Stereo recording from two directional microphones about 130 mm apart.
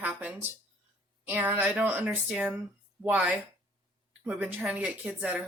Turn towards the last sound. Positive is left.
turn(degrees=-10)  # may be behind; listen again after turning